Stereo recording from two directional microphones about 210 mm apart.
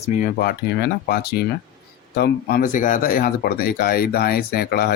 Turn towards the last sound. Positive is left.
turn(degrees=45)  # may be behind; listen again after turning